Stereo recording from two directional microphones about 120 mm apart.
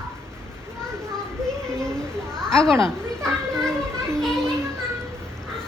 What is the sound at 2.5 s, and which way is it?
Speech, 5° left (ahead or behind).